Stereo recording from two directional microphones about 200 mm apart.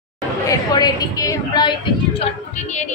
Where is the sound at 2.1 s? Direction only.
35° left (ahead or behind).